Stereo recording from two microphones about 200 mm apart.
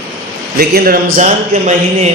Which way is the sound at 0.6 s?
50° right (ahead or behind).